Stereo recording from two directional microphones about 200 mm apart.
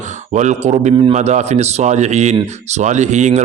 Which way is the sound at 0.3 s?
35° right (ahead or behind).